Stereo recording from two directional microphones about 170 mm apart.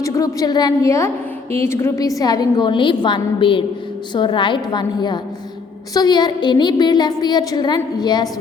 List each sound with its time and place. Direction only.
0.0 s a woman's voice: 20° left (ahead or behind)